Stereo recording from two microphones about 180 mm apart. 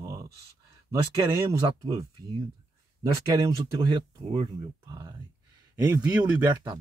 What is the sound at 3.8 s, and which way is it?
Speech, 25° right (ahead or behind).